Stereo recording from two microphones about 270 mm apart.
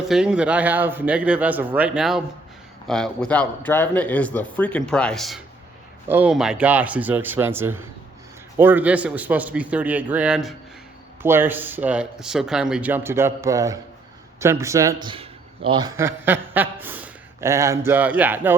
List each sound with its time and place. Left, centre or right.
0.1 s a man's voice: centre